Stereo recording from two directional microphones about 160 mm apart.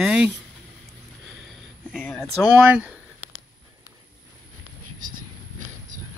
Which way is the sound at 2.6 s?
10° right (ahead or behind).